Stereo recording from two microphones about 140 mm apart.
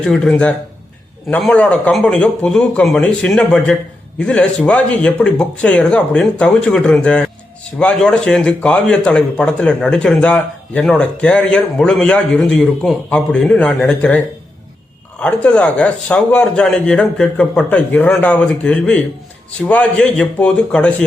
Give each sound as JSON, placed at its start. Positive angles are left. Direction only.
{"t": 0.0, "sound": "speech", "side_deg": 5}
{"t": 15.2, "sound": "speech", "side_deg": 10}